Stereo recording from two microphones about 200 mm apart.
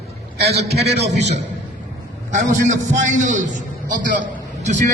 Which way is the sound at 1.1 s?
35° right (ahead or behind).